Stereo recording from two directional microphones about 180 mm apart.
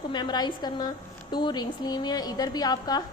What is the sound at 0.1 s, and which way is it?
A woman's voice, 25° left (ahead or behind).